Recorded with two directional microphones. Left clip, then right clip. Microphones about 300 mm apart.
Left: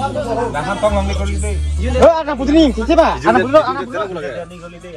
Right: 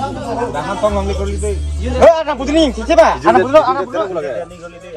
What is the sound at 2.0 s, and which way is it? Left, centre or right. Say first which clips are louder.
A man's voice: right 2 dB; centre.